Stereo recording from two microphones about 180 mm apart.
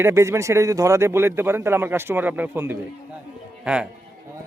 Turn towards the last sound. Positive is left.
turn(degrees=-5)  # may be behind; listen again after turning